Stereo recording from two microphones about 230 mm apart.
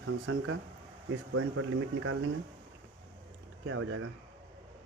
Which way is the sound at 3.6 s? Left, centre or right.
Right.